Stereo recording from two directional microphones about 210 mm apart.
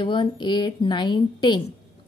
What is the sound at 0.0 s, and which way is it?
Speech, 20° left (ahead or behind).